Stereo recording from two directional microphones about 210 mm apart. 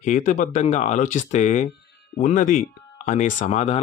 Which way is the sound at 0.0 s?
35° left (ahead or behind).